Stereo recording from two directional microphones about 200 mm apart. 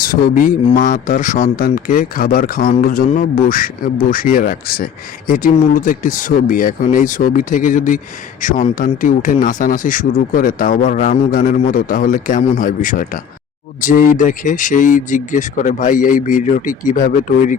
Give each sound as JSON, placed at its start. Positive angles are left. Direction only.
{"t": 0.0, "sound": "speech", "side_deg": 45}